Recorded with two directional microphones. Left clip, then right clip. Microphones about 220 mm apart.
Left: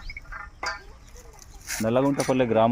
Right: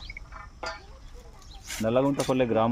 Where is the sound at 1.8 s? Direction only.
40° left (ahead or behind).